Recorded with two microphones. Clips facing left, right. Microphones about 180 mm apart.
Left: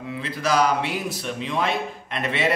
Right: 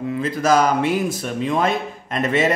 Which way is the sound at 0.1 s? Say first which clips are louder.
Right 5 dB; 45° right (ahead or behind).